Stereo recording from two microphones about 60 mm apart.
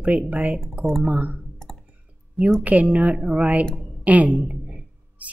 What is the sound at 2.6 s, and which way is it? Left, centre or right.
A woman's voice, right.